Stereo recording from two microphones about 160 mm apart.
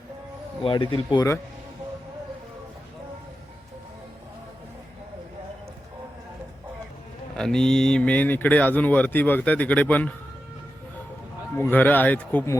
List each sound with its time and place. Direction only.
0.6 s speech: 30° left (ahead or behind)
7.3 s speech: 5° left (ahead or behind)
11.5 s speech: 10° left (ahead or behind)